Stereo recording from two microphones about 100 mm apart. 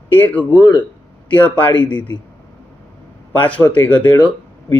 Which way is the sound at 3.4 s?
15° left (ahead or behind).